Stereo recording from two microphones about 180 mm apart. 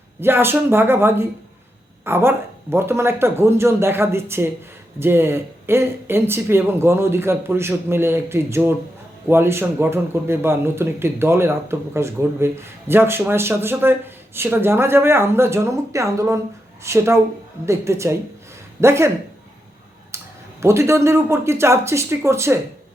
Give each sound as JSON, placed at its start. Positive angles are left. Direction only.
{"t": 0.2, "sound": "speech", "side_deg": -15}
{"t": 20.6, "sound": "speech", "side_deg": -15}